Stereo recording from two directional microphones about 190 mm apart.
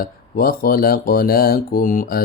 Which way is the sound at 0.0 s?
50° left (ahead or behind).